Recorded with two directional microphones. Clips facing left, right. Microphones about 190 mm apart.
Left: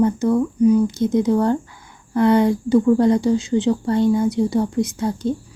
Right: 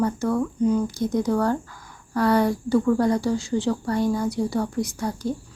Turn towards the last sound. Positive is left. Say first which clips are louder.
# left 5 dB
turn(degrees=20)  # may be behind; listen again after turning